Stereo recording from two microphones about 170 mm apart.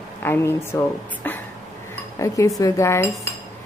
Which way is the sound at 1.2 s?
10° left (ahead or behind).